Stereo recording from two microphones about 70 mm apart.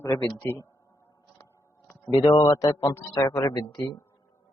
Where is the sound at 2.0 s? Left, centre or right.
Left.